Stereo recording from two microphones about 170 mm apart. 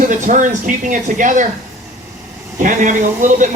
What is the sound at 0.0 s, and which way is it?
Speech, 45° right (ahead or behind).